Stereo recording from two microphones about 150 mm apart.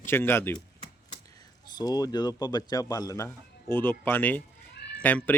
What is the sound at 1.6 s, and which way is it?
A man's voice, 25° left (ahead or behind).